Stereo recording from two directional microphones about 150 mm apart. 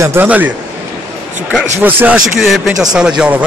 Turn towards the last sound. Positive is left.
turn(degrees=-5)  # may be behind; listen again after turning